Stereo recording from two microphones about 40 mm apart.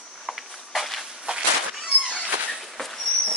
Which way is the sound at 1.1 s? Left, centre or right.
Centre.